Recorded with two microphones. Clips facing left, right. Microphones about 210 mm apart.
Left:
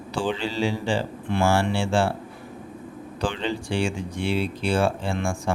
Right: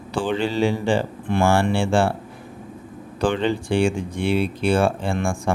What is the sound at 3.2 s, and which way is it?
Speech, 55° right (ahead or behind).